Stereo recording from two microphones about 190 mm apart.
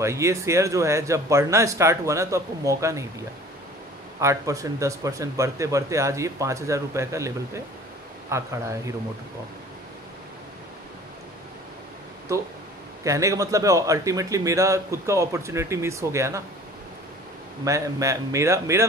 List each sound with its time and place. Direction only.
0.0 s speech: 15° right (ahead or behind)
4.2 s speech: 15° right (ahead or behind)
13.0 s speech: 15° right (ahead or behind)
17.6 s speech: 15° right (ahead or behind)